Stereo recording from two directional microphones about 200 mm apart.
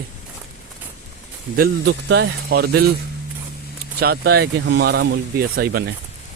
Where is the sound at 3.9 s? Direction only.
55° right (ahead or behind).